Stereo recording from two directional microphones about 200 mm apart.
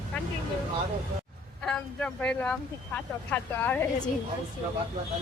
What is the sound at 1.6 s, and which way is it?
Speech, 5° left (ahead or behind).